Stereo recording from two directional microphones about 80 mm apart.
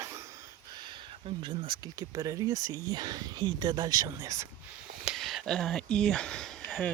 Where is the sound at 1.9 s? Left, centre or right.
Right.